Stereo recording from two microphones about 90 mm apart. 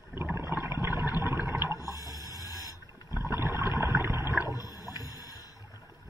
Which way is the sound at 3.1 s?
25° right (ahead or behind).